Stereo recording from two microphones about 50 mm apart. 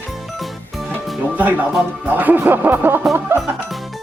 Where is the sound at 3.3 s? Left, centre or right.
Right.